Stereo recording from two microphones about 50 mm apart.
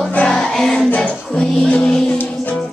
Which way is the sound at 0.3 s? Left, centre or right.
Centre.